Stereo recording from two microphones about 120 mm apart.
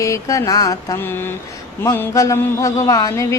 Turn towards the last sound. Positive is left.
turn(degrees=25)  # may be behind; listen again after turning